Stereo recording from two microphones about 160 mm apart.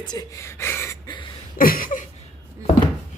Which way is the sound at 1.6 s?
60° left (ahead or behind).